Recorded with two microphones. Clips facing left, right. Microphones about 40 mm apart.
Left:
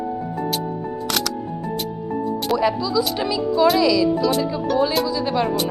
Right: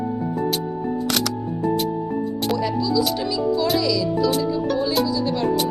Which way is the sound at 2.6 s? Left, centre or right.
Left.